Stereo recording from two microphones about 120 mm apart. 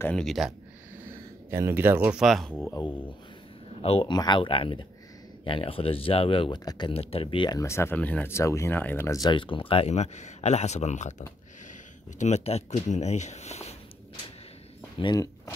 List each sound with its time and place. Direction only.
0.1 s speech: centre (ahead or behind)
1.5 s speech: 20° right (ahead or behind)
2.2 s speech: centre (ahead or behind)
3.8 s speech: 55° left (ahead or behind)
4.1 s speech: 40° left (ahead or behind)
6.6 s speech: 30° left (ahead or behind)
6.9 s speech: 55° left (ahead or behind)
7.5 s speech: 20° left (ahead or behind)
9.3 s speech: 45° left (ahead or behind); by 13.7 s 65° left (ahead or behind)